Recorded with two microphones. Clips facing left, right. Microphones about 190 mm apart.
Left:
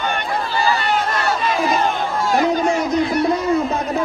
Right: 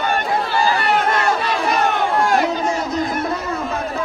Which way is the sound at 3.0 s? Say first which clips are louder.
Left 4 dB; 45° right (ahead or behind).